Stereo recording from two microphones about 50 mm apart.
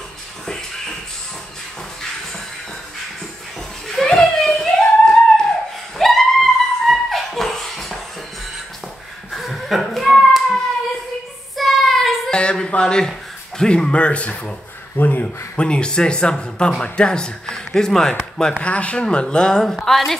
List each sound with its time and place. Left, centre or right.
3.9 s a sound: centre
9.3 s a sound: centre
11.5 s child singing: centre
12.3 s a sound: centre
13.6 s speech: centre
15.0 s speech: left
15.5 s speech: left
18.6 s speech: left
19.7 s a woman's voice: centre